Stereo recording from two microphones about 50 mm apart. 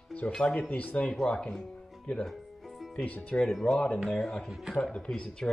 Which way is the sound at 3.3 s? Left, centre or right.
Left.